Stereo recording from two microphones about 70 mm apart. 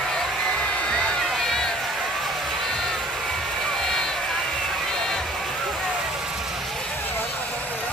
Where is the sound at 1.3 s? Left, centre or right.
Centre.